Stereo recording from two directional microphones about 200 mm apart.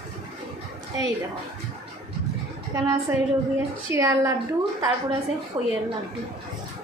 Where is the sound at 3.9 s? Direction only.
10° right (ahead or behind).